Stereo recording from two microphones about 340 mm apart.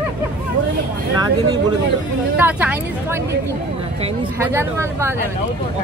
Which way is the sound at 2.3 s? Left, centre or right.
Centre.